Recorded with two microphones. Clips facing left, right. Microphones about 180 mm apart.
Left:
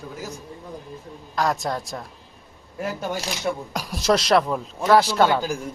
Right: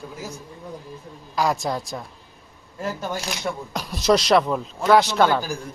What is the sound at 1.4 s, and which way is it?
Speech, centre (ahead or behind).